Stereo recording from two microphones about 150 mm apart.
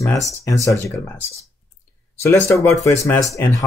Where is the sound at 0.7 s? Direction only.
20° left (ahead or behind).